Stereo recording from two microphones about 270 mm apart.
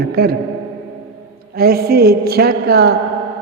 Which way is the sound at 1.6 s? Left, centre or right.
Right.